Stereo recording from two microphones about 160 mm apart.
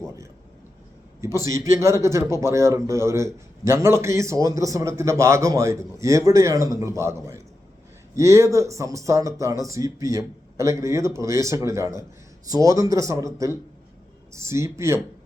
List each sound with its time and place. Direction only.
1.8 s a man's voice: 20° right (ahead or behind)